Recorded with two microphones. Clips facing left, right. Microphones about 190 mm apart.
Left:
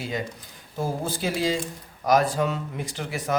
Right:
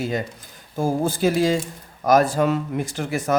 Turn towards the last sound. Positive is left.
turn(degrees=-45)  # may be behind; listen again after turning